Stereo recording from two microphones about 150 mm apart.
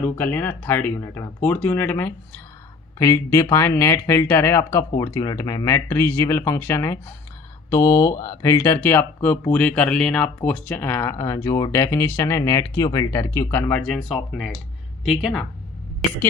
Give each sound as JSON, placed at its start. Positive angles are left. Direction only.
{"t": 0.0, "sound": "speech", "side_deg": 10}